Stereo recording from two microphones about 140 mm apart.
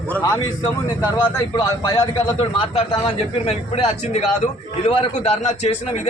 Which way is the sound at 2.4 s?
40° left (ahead or behind).